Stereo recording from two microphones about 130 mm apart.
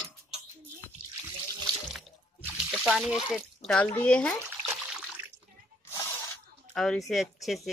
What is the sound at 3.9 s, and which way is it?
Speech, 10° left (ahead or behind).